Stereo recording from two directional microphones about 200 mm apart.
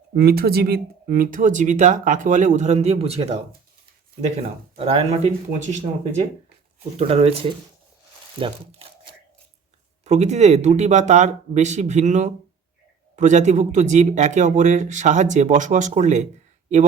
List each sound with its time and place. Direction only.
0.1 s speech: 50° right (ahead or behind); by 3.3 s 30° right (ahead or behind)
4.4 s speech: 30° right (ahead or behind)
7.0 s speech: 30° right (ahead or behind)
10.0 s speech: 35° right (ahead or behind)